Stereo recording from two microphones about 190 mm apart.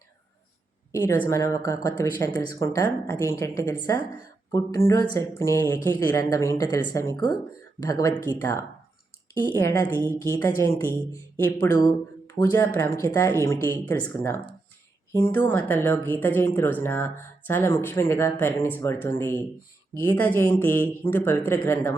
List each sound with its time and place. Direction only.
1.3 s speech: 15° left (ahead or behind)